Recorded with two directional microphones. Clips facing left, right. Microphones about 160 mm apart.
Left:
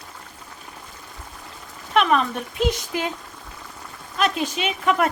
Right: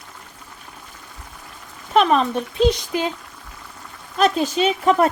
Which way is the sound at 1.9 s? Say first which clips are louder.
Right 3 dB; 35° right (ahead or behind).